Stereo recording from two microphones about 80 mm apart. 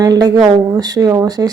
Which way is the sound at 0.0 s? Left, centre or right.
Right.